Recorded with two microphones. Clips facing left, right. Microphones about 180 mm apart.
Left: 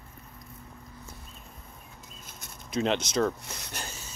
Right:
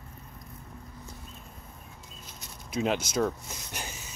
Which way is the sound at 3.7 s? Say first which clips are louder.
Right 1 dB; 15° right (ahead or behind).